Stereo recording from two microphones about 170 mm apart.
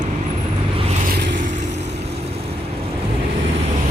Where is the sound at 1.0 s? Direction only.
65° right (ahead or behind).